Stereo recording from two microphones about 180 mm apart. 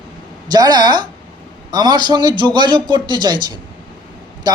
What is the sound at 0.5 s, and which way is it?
Speech, 25° right (ahead or behind).